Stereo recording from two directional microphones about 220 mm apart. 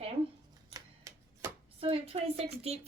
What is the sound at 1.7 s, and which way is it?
A woman's voice, 25° right (ahead or behind).